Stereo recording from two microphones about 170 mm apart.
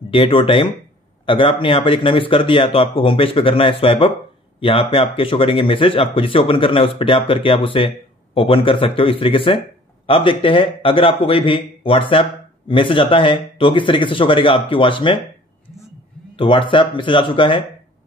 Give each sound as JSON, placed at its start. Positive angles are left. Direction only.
{"t": 0.1, "sound": "a man's voice", "side_deg": 30}
{"t": 16.3, "sound": "speech", "side_deg": 30}